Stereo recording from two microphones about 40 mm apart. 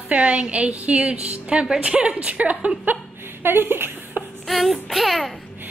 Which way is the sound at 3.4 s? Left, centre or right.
Right.